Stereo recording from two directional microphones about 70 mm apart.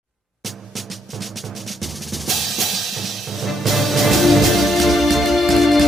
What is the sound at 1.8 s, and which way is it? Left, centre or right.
Drum kit, centre.